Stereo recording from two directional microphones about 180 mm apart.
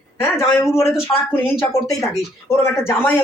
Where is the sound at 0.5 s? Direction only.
15° left (ahead or behind).